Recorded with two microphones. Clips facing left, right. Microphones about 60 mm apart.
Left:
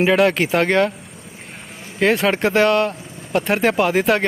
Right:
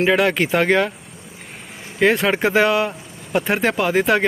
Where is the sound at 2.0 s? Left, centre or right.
Centre.